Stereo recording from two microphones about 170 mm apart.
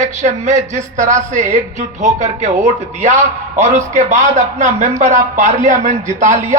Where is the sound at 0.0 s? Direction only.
45° right (ahead or behind).